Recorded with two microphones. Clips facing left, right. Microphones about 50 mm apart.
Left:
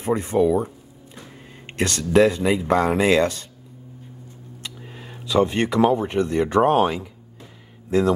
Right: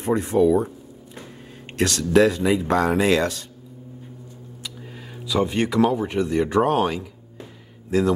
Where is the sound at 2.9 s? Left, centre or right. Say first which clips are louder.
Left 1 dB; centre.